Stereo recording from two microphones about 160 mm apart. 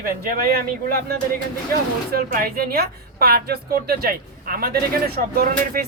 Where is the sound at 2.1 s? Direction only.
65° right (ahead or behind).